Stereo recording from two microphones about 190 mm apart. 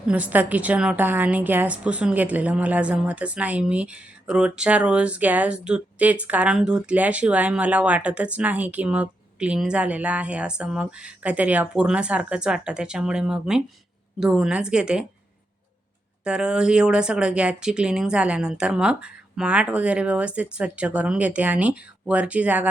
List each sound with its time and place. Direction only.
0.1 s a woman's voice: 10° right (ahead or behind)
16.2 s speech: 5° right (ahead or behind)